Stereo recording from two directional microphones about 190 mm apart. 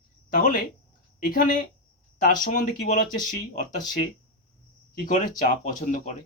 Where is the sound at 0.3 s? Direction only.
45° left (ahead or behind).